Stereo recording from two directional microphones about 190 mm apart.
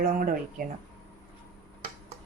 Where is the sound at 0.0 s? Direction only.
45° right (ahead or behind).